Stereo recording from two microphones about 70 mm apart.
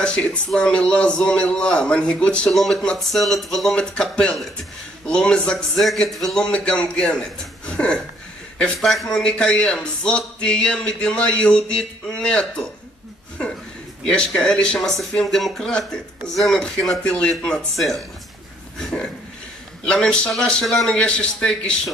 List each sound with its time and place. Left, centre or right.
0.0 s a sound: centre
0.5 s speech: centre
2.5 s speech: centre
4.0 s speech: centre
6.4 s speech: centre
8.7 s speech: centre
9.1 s speech: centre
14.0 s speech: centre
20.9 s speech: centre